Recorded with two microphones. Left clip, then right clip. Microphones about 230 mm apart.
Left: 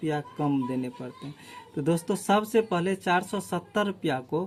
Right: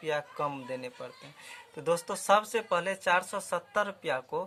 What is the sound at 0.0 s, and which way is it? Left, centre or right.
Speech, centre.